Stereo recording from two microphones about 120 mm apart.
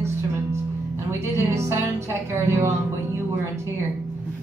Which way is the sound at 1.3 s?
20° right (ahead or behind).